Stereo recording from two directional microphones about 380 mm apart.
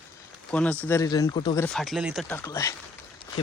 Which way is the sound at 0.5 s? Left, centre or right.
Centre.